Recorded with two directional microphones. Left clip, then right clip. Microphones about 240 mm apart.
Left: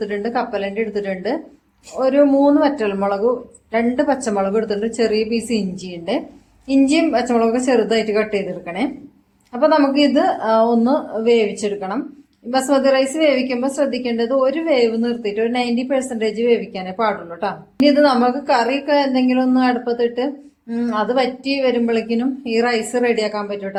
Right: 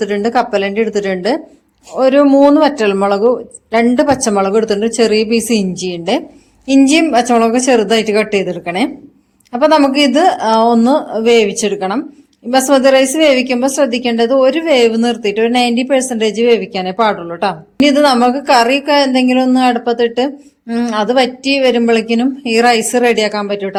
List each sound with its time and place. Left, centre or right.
0.0 s a woman's voice: right